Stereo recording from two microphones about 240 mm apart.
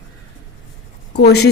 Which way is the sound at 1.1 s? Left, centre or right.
Left.